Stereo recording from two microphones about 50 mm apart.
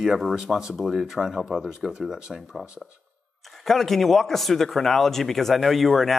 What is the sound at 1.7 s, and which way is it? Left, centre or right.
Speech, centre.